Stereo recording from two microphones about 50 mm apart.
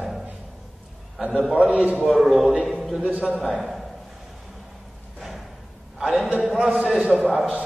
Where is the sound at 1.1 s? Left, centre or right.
Centre.